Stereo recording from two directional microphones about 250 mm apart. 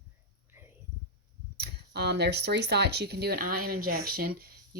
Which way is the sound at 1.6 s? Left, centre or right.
Right.